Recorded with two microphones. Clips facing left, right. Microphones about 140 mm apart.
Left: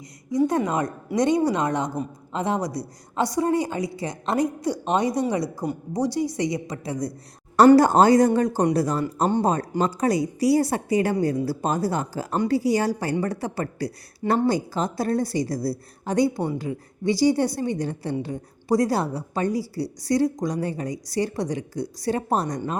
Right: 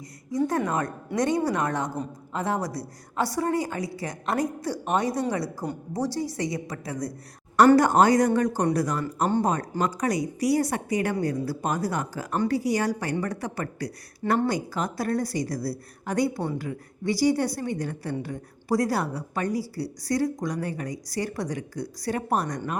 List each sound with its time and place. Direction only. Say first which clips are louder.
0.3 s a woman's voice: left 3 dB; 20° left (ahead or behind)